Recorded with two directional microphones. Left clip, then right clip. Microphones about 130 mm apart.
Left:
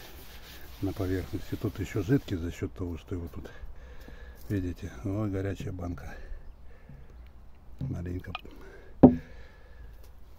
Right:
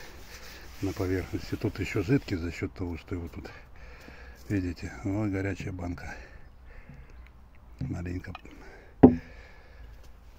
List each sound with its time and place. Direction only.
0.8 s speech: 15° left (ahead or behind)
7.9 s speech: 15° left (ahead or behind)
8.5 s a sound: 35° left (ahead or behind)